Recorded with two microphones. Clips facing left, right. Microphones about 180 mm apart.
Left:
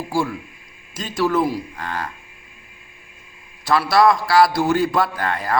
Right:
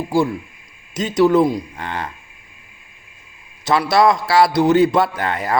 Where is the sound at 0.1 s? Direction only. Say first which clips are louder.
Right 5 dB; 20° right (ahead or behind).